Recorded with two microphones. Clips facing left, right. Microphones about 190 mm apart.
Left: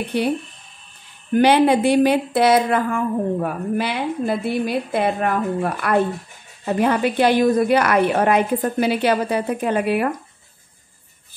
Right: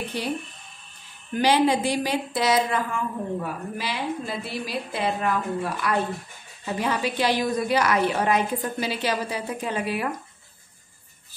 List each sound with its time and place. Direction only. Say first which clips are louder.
0.1 s a woman's voice: left 11 dB; 60° left (ahead or behind)
1.3 s a woman's voice: left 6 dB; 60° left (ahead or behind)